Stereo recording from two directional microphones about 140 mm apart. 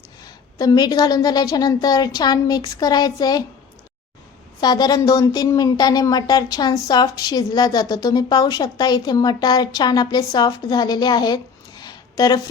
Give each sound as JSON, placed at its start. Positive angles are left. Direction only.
{"t": 0.6, "sound": "speech", "side_deg": 25}
{"t": 4.6, "sound": "speech", "side_deg": 30}